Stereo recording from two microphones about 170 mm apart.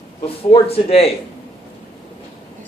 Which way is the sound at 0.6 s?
35° left (ahead or behind).